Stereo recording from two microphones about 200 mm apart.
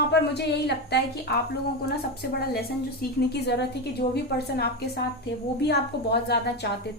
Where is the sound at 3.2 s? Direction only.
55° left (ahead or behind).